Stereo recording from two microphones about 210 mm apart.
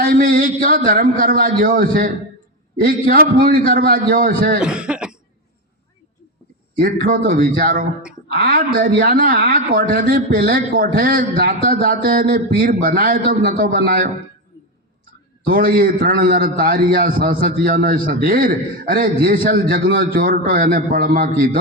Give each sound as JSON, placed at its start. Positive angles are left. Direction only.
{"t": 0.0, "sound": "a man's voice", "side_deg": -40}
{"t": 4.6, "sound": "speech", "side_deg": -5}
{"t": 6.7, "sound": "a man's voice", "side_deg": -45}
{"t": 15.4, "sound": "a man's voice", "side_deg": -45}